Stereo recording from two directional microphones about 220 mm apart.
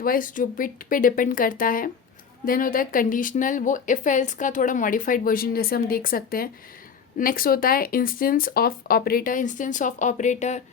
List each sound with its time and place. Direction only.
0.0 s speech: 40° left (ahead or behind)